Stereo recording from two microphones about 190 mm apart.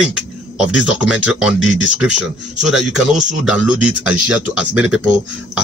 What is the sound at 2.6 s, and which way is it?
Speech, centre (ahead or behind).